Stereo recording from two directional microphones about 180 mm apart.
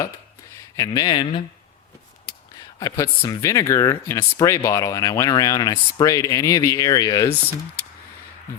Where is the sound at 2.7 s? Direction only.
20° left (ahead or behind).